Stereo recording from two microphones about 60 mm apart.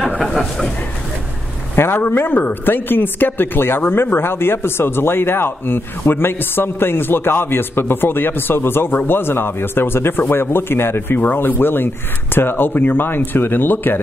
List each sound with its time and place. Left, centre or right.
0.2 s speech: centre
1.8 s speech: left